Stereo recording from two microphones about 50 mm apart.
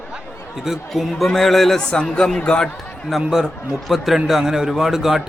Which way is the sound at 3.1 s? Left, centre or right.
Centre.